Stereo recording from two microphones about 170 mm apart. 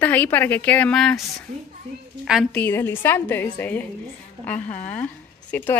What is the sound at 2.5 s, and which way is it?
A woman's voice, 10° left (ahead or behind).